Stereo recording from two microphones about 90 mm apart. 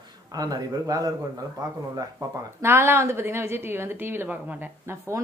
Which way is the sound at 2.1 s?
30° right (ahead or behind).